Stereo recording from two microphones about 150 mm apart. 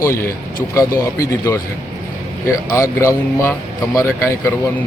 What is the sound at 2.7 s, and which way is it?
A man's voice, 20° left (ahead or behind).